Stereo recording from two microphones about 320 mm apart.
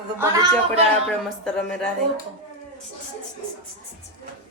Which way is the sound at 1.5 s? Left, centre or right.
Centre.